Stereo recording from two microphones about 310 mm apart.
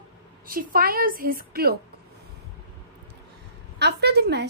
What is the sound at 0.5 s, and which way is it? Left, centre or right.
A woman's voice, right.